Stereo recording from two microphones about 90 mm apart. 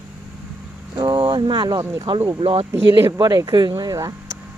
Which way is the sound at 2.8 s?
55° right (ahead or behind).